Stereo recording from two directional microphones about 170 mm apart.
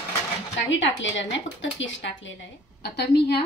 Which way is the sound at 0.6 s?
90° left.